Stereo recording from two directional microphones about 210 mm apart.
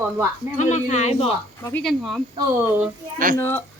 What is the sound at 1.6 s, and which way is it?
Speech, 5° left (ahead or behind).